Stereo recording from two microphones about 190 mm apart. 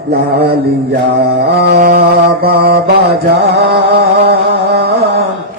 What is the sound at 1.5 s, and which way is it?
Mantra, 60° right (ahead or behind).